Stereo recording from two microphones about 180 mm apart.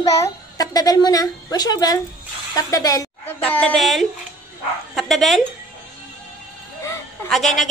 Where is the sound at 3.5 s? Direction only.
10° left (ahead or behind).